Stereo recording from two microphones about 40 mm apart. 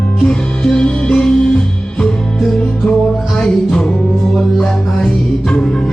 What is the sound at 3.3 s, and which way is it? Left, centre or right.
Music, left.